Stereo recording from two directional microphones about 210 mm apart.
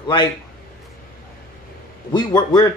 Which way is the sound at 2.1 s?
20° left (ahead or behind).